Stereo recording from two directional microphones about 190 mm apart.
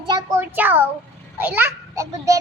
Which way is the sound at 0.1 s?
15° right (ahead or behind).